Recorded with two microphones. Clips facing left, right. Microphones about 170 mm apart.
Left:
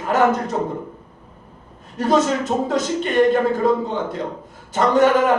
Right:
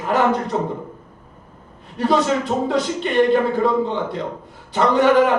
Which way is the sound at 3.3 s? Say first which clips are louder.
Even; 45° left (ahead or behind).